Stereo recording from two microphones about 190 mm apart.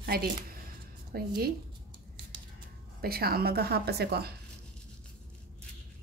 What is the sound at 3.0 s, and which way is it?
A woman's voice, 55° right (ahead or behind).